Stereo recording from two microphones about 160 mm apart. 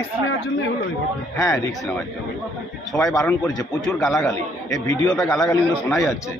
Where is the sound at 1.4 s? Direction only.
20° left (ahead or behind).